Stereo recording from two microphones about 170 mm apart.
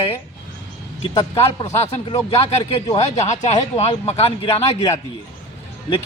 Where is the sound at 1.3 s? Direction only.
40° left (ahead or behind).